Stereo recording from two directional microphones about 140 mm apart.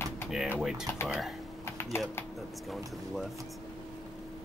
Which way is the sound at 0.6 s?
5° right (ahead or behind).